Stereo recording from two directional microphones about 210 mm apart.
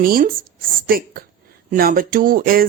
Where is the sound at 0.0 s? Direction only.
45° right (ahead or behind).